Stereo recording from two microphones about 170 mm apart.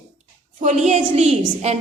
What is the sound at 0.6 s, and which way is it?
A woman's voice, 45° right (ahead or behind).